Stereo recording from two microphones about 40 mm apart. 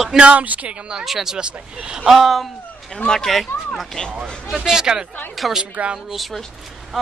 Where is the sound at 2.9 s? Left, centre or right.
Centre.